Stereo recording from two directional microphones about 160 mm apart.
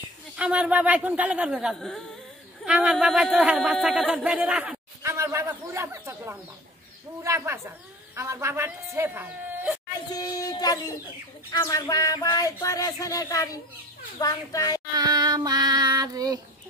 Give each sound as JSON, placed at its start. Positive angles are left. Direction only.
{"t": 0.4, "sound": "speech", "side_deg": -10}
{"t": 5.0, "sound": "speech", "side_deg": -15}
{"t": 10.1, "sound": "speech", "side_deg": 25}
{"t": 15.0, "sound": "child singing", "side_deg": -25}